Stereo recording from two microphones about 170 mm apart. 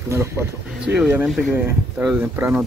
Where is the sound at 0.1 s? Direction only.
15° right (ahead or behind).